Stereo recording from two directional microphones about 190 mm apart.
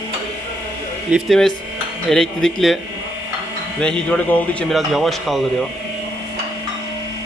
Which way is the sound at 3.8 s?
5° left (ahead or behind).